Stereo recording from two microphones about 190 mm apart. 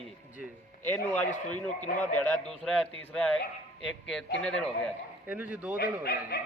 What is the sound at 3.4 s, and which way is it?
Speech, 80° left.